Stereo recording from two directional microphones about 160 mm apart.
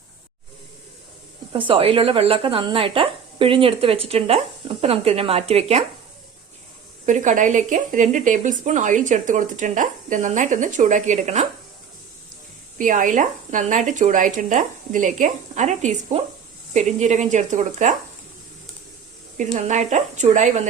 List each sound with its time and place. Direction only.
1.5 s speech: 35° right (ahead or behind)
7.0 s speech: 50° right (ahead or behind)
12.8 s speech: 55° right (ahead or behind)
19.5 s speech: 45° right (ahead or behind)